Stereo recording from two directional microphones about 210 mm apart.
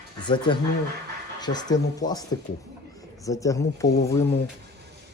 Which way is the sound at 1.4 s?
20° left (ahead or behind).